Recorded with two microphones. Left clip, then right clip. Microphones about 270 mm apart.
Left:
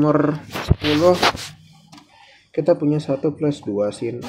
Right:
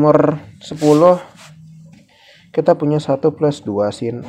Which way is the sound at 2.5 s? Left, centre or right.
Right.